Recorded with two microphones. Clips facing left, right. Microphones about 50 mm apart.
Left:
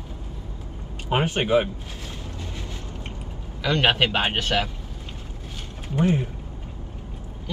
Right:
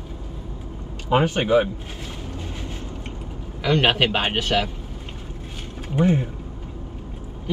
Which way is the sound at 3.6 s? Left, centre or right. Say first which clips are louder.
Right 2 dB; right.